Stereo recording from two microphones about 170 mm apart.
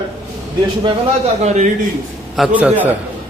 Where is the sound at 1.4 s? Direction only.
45° right (ahead or behind).